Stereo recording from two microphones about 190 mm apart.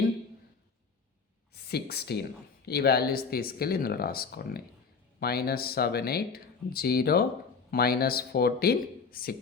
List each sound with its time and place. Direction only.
1.6 s speech: 55° left (ahead or behind)